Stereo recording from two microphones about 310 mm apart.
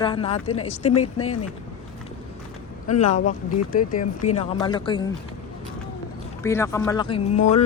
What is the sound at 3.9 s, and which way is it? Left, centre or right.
Speech, left.